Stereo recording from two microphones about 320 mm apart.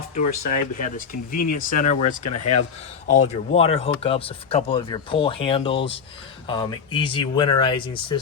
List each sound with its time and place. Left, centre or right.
0.1 s speech: left
2.3 s speech: left
3.2 s speech: centre